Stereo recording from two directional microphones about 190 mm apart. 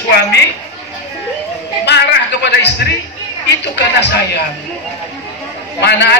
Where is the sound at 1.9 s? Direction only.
60° left (ahead or behind).